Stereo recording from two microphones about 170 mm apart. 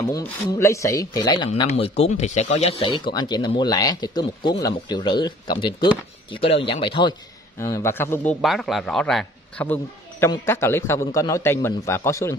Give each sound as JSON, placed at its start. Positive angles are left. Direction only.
{"t": 0.0, "sound": "speech", "side_deg": 20}
{"t": 1.7, "sound": "speech", "side_deg": 40}
{"t": 7.5, "sound": "a man's voice", "side_deg": 15}